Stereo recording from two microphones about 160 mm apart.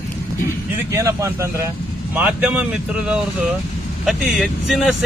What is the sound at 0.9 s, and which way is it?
Speech, 20° right (ahead or behind).